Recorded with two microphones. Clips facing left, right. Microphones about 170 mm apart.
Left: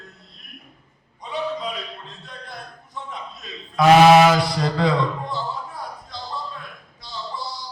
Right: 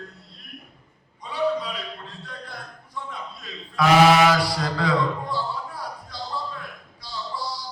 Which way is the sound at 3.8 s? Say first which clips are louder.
Left 5 dB; 20° left (ahead or behind).